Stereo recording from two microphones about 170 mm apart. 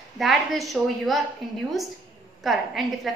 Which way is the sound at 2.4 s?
Centre (ahead or behind).